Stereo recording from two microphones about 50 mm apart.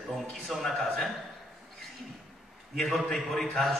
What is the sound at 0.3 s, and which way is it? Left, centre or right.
Speech, centre.